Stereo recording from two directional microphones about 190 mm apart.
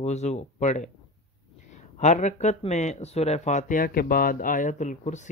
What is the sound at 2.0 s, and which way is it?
Speech, 40° left (ahead or behind).